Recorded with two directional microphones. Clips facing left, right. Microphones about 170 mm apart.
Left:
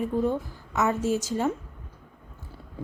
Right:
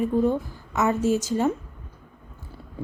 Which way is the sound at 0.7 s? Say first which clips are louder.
Right 3 dB; 15° right (ahead or behind).